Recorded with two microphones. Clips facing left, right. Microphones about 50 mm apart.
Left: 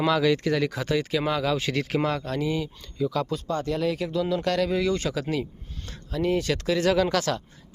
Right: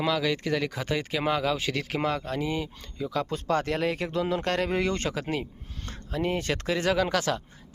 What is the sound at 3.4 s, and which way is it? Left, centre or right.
Speech, right.